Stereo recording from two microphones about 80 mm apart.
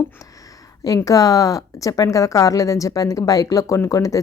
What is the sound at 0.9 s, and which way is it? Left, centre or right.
A woman's voice, left.